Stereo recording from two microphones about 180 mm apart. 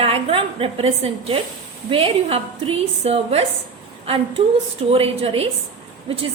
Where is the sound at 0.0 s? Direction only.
35° right (ahead or behind).